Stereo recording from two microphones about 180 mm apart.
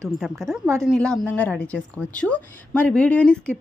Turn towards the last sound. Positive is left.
turn(degrees=5)  # may be behind; listen again after turning